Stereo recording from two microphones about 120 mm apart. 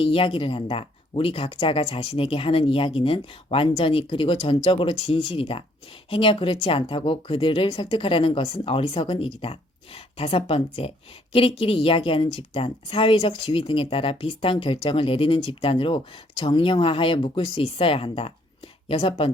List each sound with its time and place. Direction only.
0.0 s speech: 50° left (ahead or behind)